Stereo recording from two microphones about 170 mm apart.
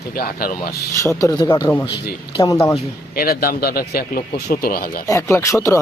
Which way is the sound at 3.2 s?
60° left (ahead or behind).